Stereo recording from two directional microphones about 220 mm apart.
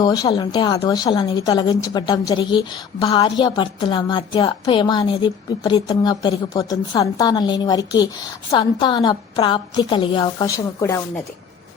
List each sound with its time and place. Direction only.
0.0 s a woman's voice: 20° left (ahead or behind)